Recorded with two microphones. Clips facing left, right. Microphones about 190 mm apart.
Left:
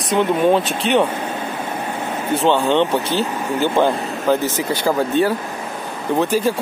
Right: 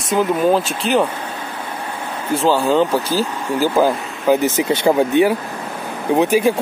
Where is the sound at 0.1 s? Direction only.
Centre (ahead or behind).